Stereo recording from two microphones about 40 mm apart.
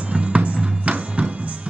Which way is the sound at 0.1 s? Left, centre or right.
Right.